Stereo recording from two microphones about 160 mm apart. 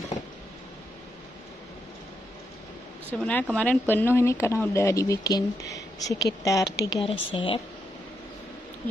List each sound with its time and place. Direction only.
3.1 s a woman's voice: 10° left (ahead or behind); by 7.6 s 35° left (ahead or behind)